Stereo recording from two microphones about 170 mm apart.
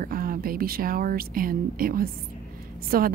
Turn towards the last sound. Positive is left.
turn(degrees=-60)  # may be behind; listen again after turning